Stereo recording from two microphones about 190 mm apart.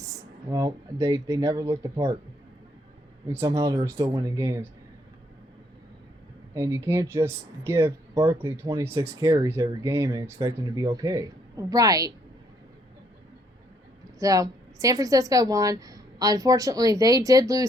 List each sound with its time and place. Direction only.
0.0 s speech: 15° right (ahead or behind)
3.2 s speech: 15° right (ahead or behind)
6.5 s speech: 15° right (ahead or behind)
14.2 s speech: 15° right (ahead or behind)